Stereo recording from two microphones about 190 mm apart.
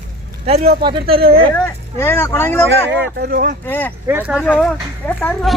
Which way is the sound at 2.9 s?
60° right (ahead or behind).